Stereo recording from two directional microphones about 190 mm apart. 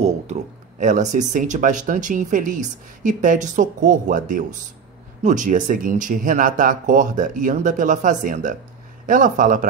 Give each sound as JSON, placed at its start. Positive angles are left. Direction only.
{"t": 0.0, "sound": "speech", "side_deg": -40}